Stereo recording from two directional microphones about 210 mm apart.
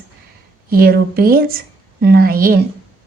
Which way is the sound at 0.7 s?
45° right (ahead or behind).